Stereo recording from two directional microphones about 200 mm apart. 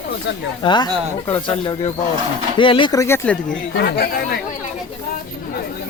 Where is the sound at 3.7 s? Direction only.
50° left (ahead or behind).